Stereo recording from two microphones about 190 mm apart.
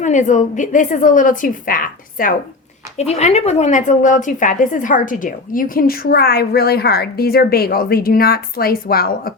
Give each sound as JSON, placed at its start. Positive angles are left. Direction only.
{"t": 0.0, "sound": "a woman's voice", "side_deg": 40}
{"t": 3.0, "sound": "a woman's voice", "side_deg": 35}